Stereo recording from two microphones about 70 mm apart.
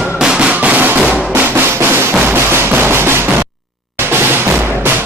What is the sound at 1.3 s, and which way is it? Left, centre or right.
Drum, right.